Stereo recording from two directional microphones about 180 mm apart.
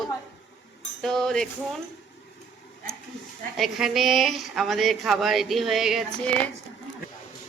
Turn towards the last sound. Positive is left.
turn(degrees=0)  # may be behind; listen again after turning